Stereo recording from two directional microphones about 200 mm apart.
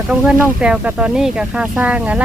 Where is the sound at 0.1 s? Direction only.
5° right (ahead or behind).